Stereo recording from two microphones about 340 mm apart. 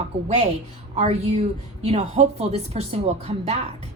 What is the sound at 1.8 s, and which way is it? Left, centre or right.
Speech, centre.